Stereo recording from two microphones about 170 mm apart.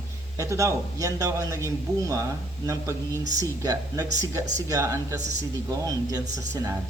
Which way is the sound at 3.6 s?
20° right (ahead or behind).